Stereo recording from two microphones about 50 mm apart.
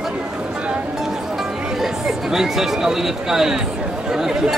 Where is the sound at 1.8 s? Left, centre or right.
Centre.